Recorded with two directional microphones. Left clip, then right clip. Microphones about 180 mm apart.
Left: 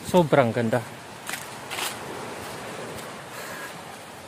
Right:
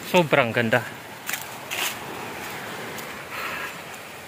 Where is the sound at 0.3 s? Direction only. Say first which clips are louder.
Right 1 dB; 15° left (ahead or behind).